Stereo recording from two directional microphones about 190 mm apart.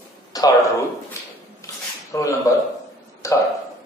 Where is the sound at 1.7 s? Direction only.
15° left (ahead or behind).